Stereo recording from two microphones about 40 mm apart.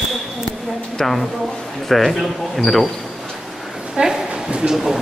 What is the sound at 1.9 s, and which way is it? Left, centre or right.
Speech, centre.